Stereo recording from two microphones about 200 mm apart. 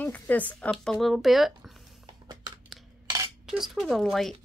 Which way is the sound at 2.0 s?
20° right (ahead or behind).